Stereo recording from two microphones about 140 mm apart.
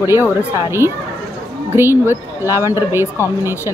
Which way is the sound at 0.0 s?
20° right (ahead or behind).